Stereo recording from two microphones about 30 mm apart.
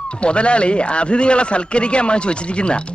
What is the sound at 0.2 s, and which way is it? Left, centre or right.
A man's voice, left.